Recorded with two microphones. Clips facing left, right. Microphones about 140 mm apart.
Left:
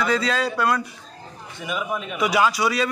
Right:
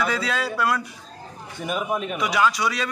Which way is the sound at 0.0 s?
5° right (ahead or behind).